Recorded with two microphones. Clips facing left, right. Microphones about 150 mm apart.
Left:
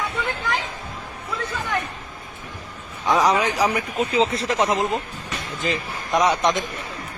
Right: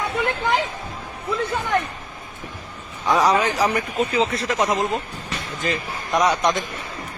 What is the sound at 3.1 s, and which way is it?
Speech, centre (ahead or behind).